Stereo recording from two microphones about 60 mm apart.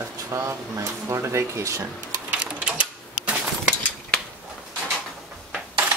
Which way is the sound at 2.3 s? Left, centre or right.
Right.